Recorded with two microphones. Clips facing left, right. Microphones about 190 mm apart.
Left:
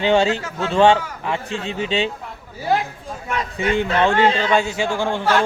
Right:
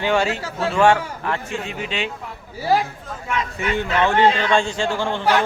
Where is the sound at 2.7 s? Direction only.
Centre (ahead or behind).